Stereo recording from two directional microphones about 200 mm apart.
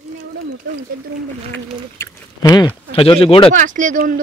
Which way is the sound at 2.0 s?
20° left (ahead or behind).